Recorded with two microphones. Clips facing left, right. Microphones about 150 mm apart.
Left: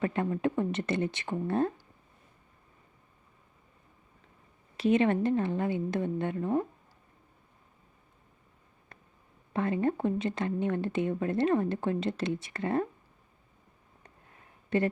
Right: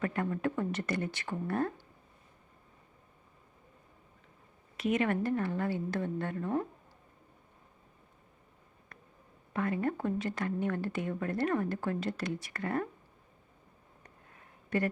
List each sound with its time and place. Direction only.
0.0 s speech: 20° left (ahead or behind)
4.8 s speech: 30° left (ahead or behind)
8.9 s a sound: 25° left (ahead or behind)
9.5 s speech: 25° left (ahead or behind)
14.7 s speech: 25° left (ahead or behind)